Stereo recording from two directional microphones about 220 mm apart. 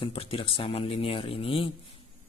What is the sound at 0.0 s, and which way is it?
Speech, 25° left (ahead or behind).